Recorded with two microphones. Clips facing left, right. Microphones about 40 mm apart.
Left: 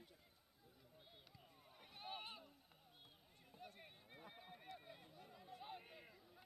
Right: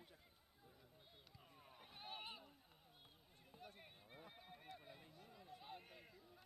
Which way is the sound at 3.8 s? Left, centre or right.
Centre.